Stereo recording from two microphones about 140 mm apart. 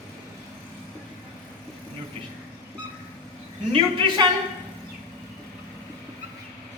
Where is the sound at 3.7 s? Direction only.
40° right (ahead or behind).